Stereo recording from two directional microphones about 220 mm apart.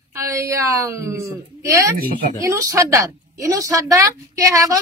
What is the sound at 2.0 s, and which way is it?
Speech, 40° right (ahead or behind).